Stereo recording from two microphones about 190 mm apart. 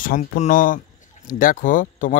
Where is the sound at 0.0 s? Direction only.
45° left (ahead or behind).